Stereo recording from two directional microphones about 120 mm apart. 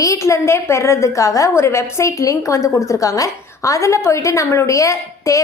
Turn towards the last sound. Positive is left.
turn(degrees=25)  # may be behind; listen again after turning